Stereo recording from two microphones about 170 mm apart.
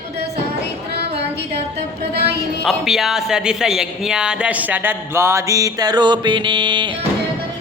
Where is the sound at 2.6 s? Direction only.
Centre (ahead or behind); by 6.9 s 25° right (ahead or behind).